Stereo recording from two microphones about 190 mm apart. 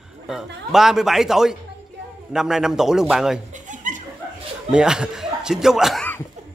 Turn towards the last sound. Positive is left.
turn(degrees=5)  # may be behind; listen again after turning